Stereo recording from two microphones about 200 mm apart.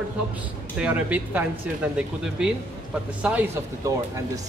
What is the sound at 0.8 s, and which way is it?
Speech, 5° right (ahead or behind).